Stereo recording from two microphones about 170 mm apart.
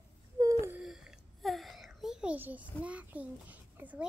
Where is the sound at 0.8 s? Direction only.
5° right (ahead or behind).